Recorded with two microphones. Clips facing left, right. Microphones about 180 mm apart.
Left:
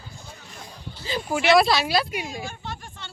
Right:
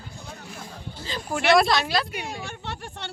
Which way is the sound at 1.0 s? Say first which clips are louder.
Left 4 dB; 10° left (ahead or behind).